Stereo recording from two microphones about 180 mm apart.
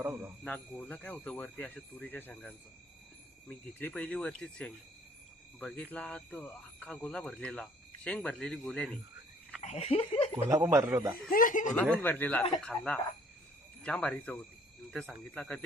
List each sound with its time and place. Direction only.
0.0 s a man's voice: 10° right (ahead or behind)
0.4 s speech: 10° left (ahead or behind)
9.6 s laughter: 35° left (ahead or behind)
10.5 s a man's voice: 15° right (ahead or behind)
11.3 s speech: 50° left (ahead or behind)
11.9 s speech: 10° left (ahead or behind)